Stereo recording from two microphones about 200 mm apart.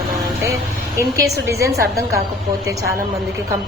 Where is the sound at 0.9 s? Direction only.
15° right (ahead or behind).